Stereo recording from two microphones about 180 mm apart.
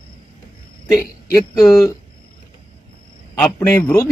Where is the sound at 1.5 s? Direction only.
20° left (ahead or behind).